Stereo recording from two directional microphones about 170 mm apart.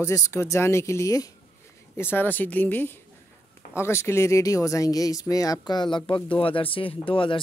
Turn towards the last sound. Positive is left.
turn(degrees=30)  # may be behind; listen again after turning